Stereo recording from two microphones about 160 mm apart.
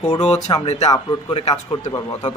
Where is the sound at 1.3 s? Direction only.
40° left (ahead or behind).